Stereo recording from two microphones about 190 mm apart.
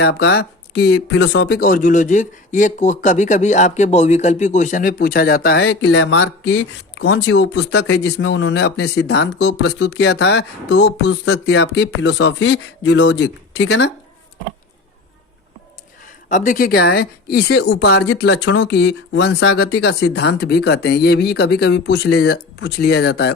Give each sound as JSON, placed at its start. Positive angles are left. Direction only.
{"t": 0.0, "sound": "speech", "side_deg": 60}
{"t": 16.3, "sound": "speech", "side_deg": 45}